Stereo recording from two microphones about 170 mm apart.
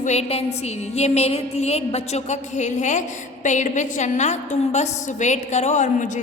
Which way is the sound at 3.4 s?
45° left (ahead or behind).